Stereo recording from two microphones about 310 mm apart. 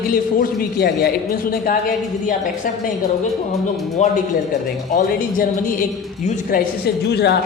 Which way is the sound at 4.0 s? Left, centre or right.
Left.